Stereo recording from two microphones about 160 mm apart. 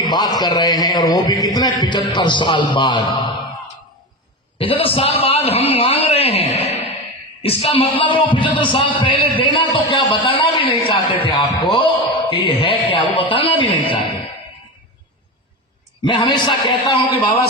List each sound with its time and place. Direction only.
0.1 s a man's voice: 25° left (ahead or behind)
4.5 s speech: 35° left (ahead or behind)
12.3 s a sound: 35° left (ahead or behind)
16.0 s speech: 30° left (ahead or behind)